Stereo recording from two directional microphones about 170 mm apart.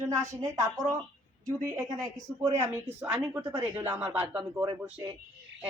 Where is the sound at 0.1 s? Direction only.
15° right (ahead or behind).